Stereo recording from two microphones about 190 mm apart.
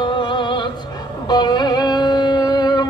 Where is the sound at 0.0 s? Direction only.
25° left (ahead or behind).